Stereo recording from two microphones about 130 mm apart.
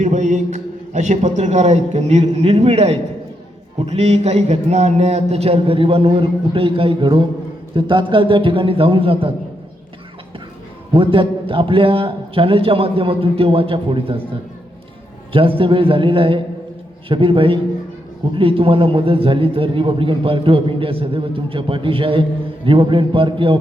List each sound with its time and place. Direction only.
0.0 s a man's voice: 75° right (ahead or behind); by 9.3 s 45° right (ahead or behind)
10.9 s a man's voice: 40° right (ahead or behind)
15.3 s a man's voice: 45° right (ahead or behind)